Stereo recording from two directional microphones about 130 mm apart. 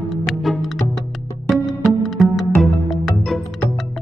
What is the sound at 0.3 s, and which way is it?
Music, centre (ahead or behind).